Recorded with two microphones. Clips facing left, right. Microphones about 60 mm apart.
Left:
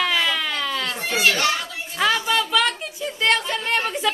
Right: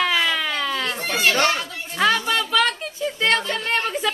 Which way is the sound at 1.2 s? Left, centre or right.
Right.